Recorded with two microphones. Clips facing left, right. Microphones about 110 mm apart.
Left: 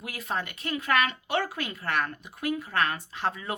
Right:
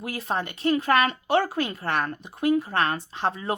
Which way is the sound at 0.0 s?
30° right (ahead or behind).